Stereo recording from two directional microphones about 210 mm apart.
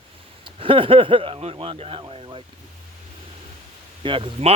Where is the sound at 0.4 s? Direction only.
25° right (ahead or behind).